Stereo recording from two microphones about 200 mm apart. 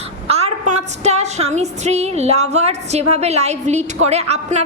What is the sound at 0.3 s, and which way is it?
A woman's voice, 30° right (ahead or behind).